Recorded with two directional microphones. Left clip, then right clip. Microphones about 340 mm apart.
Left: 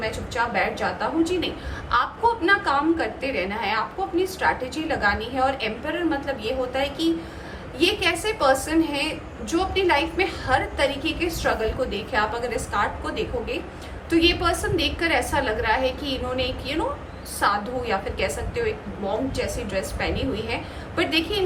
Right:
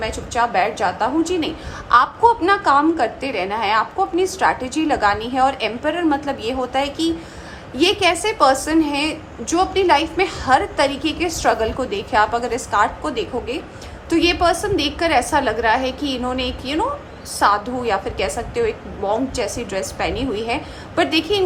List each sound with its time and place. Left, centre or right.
0.0 s a woman's voice: centre